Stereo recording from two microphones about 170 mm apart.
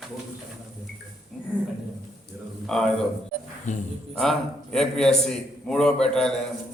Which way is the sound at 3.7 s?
45° left (ahead or behind).